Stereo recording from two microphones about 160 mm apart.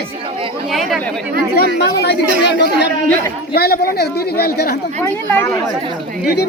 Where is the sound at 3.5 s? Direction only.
75° left (ahead or behind).